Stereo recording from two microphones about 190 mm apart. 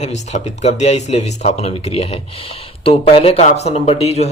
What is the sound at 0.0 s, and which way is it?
Speech, 35° left (ahead or behind).